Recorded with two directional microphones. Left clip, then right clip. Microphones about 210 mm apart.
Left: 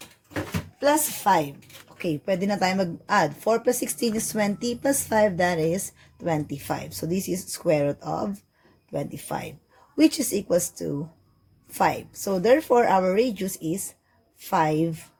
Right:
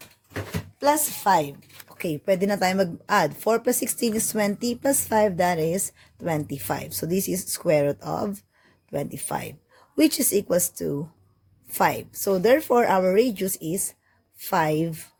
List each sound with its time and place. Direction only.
1.2 s a woman's voice: 30° right (ahead or behind)